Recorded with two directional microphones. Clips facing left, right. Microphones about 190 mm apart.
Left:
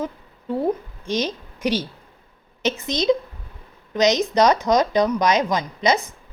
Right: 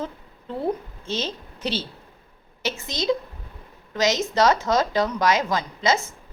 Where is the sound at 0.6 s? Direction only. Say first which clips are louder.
Left 1 dB; 15° left (ahead or behind).